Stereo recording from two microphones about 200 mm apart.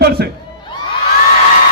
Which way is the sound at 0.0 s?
50° right (ahead or behind).